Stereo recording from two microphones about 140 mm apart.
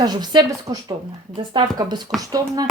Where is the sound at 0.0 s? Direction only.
30° right (ahead or behind).